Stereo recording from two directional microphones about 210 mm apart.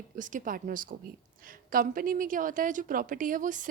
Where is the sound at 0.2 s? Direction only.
40° right (ahead or behind).